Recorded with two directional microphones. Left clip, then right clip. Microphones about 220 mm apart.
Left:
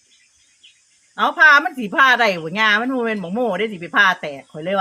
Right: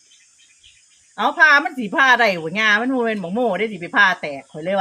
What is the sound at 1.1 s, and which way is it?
A woman's voice, 10° left (ahead or behind).